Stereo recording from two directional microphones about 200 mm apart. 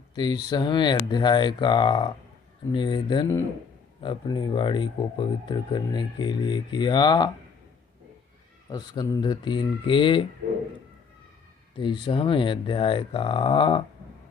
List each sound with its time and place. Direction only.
0.1 s speech: 20° left (ahead or behind)
8.7 s speech: 20° left (ahead or behind)
11.8 s speech: 25° left (ahead or behind)